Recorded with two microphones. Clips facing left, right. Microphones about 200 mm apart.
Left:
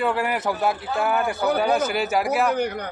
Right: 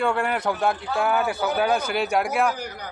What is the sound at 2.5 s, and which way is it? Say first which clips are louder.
Speech: left 10 dB; 60° left (ahead or behind).